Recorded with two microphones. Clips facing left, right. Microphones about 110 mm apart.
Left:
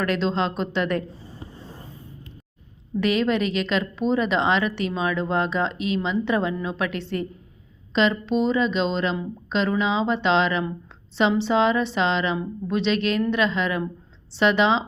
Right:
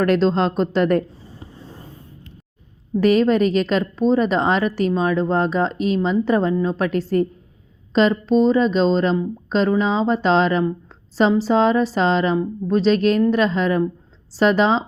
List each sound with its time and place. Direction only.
0.0 s speech: 45° right (ahead or behind)
3.0 s speech: 40° right (ahead or behind)